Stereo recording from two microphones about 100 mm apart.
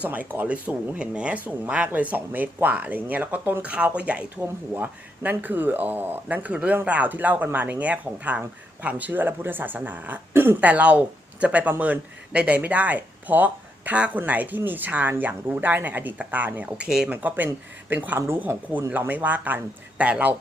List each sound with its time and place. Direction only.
0.0 s speech: 15° right (ahead or behind)